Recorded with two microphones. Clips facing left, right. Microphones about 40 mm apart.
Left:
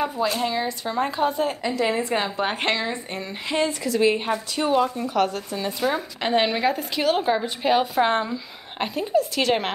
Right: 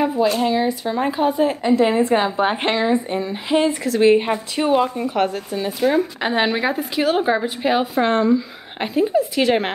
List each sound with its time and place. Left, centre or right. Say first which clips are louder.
0.0 s a sound: right 6 dB; centre
0.3 s a woman's voice: right 6 dB; centre
1.6 s a woman's voice: right 7 dB; right
2.1 s a woman's voice: right 6 dB; centre
4.0 s a woman's voice: right 7 dB; right
5.3 s a woman's voice: right 4 dB; centre
8.0 s speech: right 3 dB; centre
8.8 s a woman's voice: right 4 dB; centre